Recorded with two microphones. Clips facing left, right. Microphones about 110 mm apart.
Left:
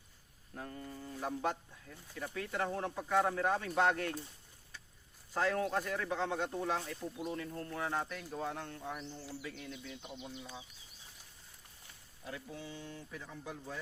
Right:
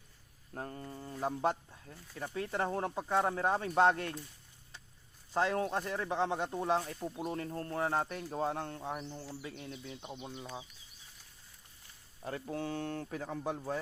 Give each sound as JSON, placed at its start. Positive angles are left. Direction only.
{"t": 0.5, "sound": "speech", "side_deg": -40}
{"t": 5.3, "sound": "speech", "side_deg": -25}
{"t": 7.2, "sound": "speech", "side_deg": -40}
{"t": 12.2, "sound": "speech", "side_deg": -50}